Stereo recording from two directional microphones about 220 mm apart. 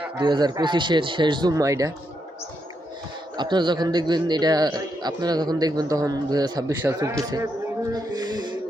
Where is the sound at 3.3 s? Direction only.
20° right (ahead or behind).